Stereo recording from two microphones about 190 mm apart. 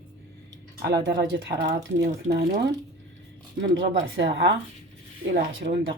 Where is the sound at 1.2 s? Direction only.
55° right (ahead or behind).